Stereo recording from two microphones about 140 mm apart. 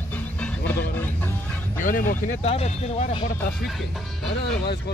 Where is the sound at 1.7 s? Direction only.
75° left (ahead or behind).